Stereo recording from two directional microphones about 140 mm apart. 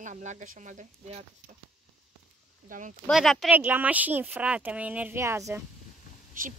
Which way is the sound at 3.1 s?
Centre (ahead or behind).